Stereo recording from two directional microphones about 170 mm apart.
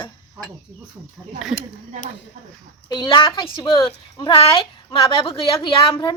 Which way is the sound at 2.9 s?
25° left (ahead or behind).